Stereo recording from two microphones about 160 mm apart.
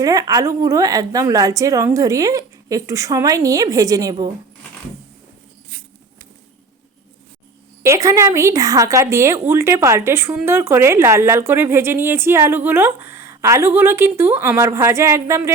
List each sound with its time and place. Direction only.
0.0 s a woman's voice: 20° right (ahead or behind)
7.8 s speech: 20° right (ahead or behind)